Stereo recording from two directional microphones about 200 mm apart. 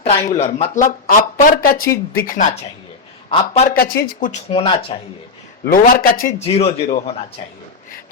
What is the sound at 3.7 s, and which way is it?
Speech, 45° left (ahead or behind).